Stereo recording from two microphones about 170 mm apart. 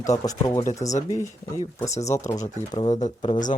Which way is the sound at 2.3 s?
20° left (ahead or behind).